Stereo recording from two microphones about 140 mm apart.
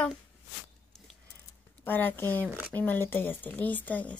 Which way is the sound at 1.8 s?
15° left (ahead or behind).